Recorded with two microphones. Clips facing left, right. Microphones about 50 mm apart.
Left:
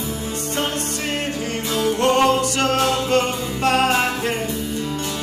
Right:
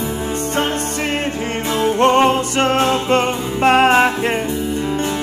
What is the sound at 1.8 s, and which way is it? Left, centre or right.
Music, right.